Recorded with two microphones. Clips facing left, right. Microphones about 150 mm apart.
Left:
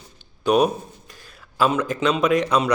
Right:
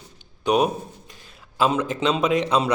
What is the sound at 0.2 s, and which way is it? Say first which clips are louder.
A man's voice: left 2 dB; 20° right (ahead or behind).